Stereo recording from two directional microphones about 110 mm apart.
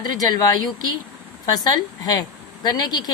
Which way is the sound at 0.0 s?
35° left (ahead or behind).